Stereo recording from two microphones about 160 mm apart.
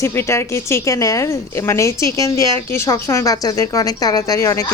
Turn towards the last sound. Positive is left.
turn(degrees=20)  # may be behind; listen again after turning